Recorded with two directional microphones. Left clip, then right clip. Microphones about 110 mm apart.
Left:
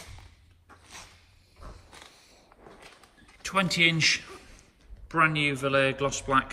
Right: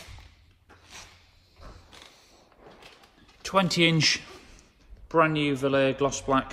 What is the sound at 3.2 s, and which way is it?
Speech, 30° right (ahead or behind).